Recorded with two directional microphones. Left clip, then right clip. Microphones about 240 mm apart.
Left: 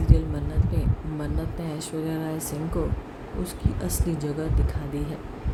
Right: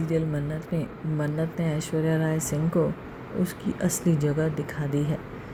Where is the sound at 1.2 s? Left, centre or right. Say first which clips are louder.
Right 6 dB; centre.